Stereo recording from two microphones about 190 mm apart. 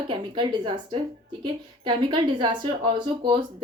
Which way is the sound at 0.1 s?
25° right (ahead or behind).